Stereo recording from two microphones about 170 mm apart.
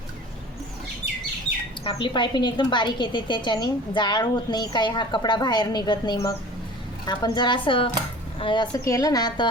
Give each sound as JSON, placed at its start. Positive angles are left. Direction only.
{"t": 1.8, "sound": "a woman's voice", "side_deg": 30}